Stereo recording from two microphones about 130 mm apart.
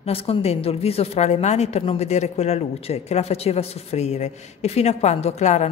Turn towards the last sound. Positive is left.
turn(degrees=60)  # may be behind; listen again after turning